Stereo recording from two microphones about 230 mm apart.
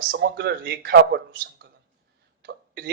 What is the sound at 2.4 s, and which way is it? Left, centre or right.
Hiccup, right.